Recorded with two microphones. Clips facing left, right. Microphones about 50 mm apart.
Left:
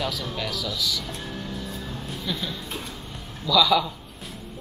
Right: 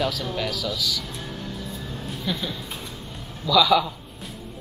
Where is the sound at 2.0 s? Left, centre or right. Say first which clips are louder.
Right 3 dB; centre.